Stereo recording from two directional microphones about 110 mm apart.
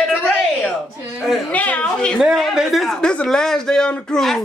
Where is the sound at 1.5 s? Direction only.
15° left (ahead or behind).